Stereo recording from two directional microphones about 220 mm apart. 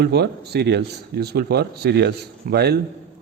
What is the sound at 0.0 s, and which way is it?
Speech, 50° right (ahead or behind).